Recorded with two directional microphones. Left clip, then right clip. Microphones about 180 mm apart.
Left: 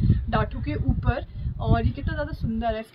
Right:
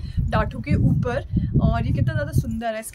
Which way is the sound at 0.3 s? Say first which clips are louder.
Right 4 dB; 40° right (ahead or behind).